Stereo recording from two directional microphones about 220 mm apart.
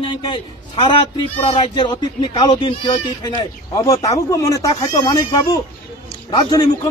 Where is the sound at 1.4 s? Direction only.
20° left (ahead or behind).